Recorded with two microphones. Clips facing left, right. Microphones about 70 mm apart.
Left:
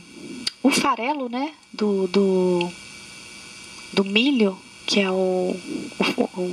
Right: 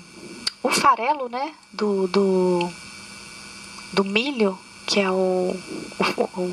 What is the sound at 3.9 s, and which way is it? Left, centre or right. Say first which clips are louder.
Speech: left 3 dB; right.